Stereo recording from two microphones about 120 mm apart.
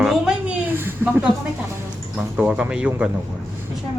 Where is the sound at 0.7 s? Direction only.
15° right (ahead or behind).